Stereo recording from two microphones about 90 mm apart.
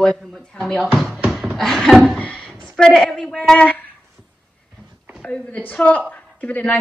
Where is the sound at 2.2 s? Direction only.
10° left (ahead or behind).